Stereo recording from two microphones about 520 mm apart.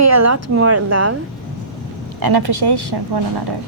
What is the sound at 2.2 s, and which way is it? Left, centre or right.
Speech, right.